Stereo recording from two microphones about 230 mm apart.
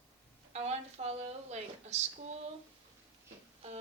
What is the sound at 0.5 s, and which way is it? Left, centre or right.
A woman's voice, right.